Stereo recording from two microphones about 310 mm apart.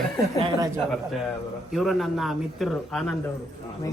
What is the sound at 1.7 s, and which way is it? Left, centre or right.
Speech, centre.